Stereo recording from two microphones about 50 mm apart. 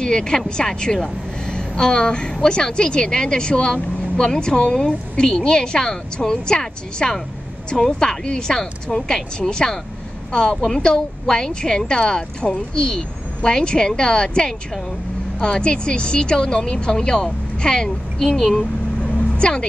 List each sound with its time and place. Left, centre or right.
0.0 s a woman's voice: centre
19.1 s vehicle: left